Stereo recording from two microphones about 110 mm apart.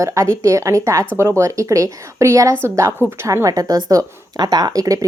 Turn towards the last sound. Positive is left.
turn(degrees=-30)  # may be behind; listen again after turning